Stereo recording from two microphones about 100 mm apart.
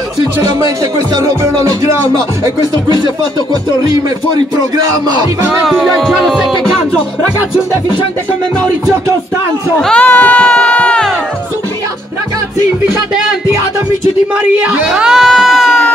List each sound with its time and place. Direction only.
1.1 s music: 35° right (ahead or behind)
4.7 s music: 40° right (ahead or behind)
5.5 s music: centre (ahead or behind)
9.8 s crowd: 10° left (ahead or behind)
14.5 s music: 10° right (ahead or behind)